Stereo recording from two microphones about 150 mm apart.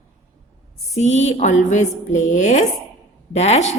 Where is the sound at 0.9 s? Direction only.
50° left (ahead or behind).